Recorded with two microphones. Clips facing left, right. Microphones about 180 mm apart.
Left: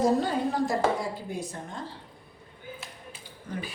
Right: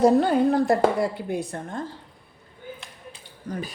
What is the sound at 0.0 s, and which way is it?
A woman's voice, 60° right (ahead or behind).